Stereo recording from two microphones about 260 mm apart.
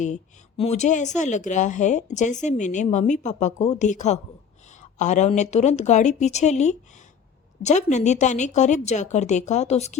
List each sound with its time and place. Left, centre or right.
0.0 s a woman's voice: left